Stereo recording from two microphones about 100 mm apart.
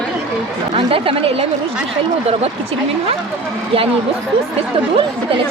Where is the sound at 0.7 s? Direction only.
70° right (ahead or behind).